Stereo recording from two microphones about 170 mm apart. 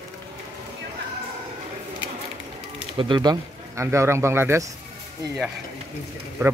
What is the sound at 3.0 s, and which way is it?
Speech, 25° right (ahead or behind).